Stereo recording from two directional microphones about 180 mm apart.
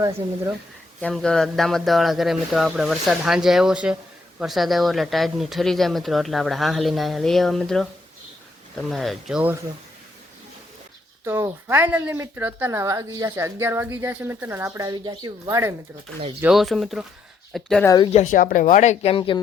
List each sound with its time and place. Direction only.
1.0 s speech: 5° left (ahead or behind)
11.3 s a woman's voice: 15° right (ahead or behind)
16.4 s speech: centre (ahead or behind)
17.8 s speech: 20° left (ahead or behind)
18.1 s speech: 40° left (ahead or behind)